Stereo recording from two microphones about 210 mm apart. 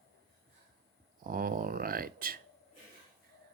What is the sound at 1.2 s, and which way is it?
Speech, 40° right (ahead or behind).